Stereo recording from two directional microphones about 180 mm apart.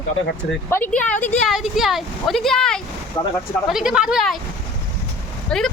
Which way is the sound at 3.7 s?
5° right (ahead or behind).